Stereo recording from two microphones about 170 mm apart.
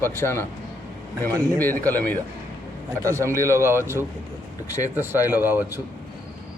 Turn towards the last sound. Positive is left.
turn(degrees=-10)  # may be behind; listen again after turning